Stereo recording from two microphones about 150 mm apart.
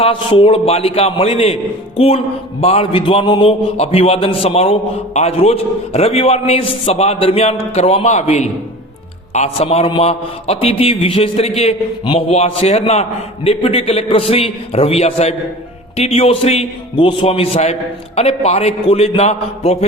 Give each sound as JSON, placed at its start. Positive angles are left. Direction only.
{"t": 0.0, "sound": "a man's voice", "side_deg": 35}